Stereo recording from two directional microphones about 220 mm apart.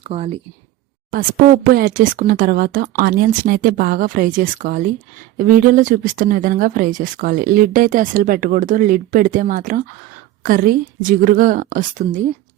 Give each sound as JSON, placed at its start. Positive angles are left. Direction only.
{"t": 0.0, "sound": "speech", "side_deg": -25}
{"t": 1.1, "sound": "speech", "side_deg": -40}